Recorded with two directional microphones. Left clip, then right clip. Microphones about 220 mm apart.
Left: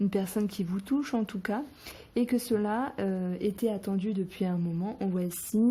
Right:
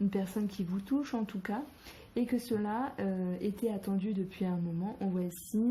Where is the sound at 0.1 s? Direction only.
50° left (ahead or behind).